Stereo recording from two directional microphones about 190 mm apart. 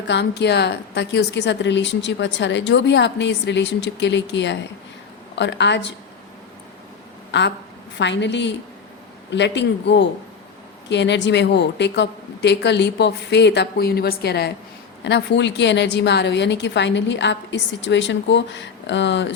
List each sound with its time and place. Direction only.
0.1 s speech: 60° left (ahead or behind)
7.3 s a woman's voice: 65° left (ahead or behind)
15.0 s speech: 70° left (ahead or behind)